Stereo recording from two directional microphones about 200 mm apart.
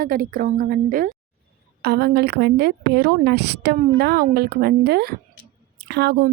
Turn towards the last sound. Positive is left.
turn(degrees=-55)  # may be behind; listen again after turning